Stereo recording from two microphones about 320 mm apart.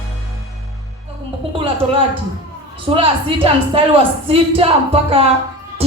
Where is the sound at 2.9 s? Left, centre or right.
Centre.